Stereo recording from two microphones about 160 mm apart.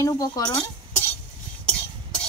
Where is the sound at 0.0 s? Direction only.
25° left (ahead or behind).